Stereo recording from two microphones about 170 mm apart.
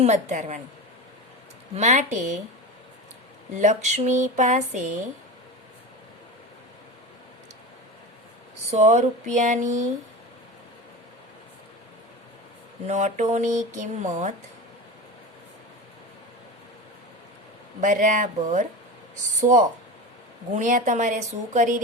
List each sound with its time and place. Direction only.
0.0 s a woman's voice: 45° right (ahead or behind)
1.7 s speech: 45° right (ahead or behind)
3.6 s speech: 45° right (ahead or behind)
8.7 s speech: 45° right (ahead or behind)
12.9 s speech: 45° right (ahead or behind)
17.7 s speech: 50° right (ahead or behind)